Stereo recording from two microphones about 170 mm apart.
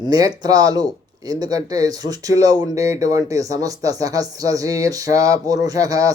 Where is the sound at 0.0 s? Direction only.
20° right (ahead or behind).